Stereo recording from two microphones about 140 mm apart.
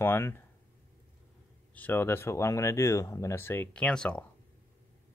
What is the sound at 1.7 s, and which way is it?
Speech, 15° left (ahead or behind).